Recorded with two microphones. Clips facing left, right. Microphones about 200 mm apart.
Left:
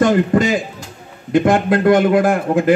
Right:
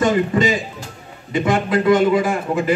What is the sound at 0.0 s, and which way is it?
A man's voice, 55° left (ahead or behind).